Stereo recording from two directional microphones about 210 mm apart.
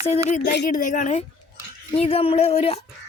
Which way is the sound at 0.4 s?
50° left (ahead or behind).